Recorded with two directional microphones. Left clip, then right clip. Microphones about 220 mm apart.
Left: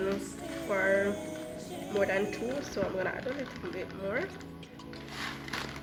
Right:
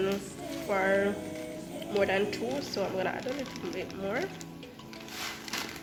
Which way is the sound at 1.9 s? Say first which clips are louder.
Right 2 dB; 45° right (ahead or behind).